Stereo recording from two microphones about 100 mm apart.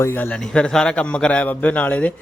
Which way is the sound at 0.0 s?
20° left (ahead or behind).